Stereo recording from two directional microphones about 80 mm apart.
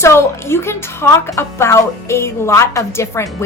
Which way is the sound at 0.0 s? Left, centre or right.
Left.